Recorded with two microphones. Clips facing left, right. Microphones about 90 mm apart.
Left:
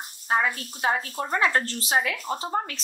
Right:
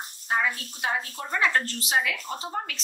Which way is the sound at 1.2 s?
40° left (ahead or behind).